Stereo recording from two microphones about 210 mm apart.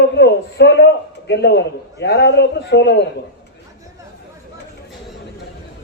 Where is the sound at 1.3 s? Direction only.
55° left (ahead or behind).